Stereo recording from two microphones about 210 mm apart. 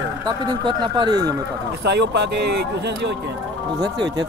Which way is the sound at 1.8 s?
55° right (ahead or behind).